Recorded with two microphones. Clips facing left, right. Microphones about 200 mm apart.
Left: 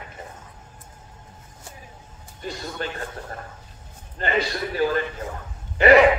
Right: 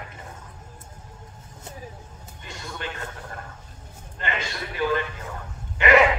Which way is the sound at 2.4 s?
40° left (ahead or behind).